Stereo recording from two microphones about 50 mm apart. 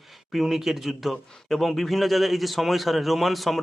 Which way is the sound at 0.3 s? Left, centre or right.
Centre.